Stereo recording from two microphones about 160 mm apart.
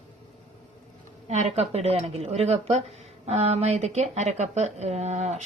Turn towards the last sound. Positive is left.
turn(degrees=-45)  # may be behind; listen again after turning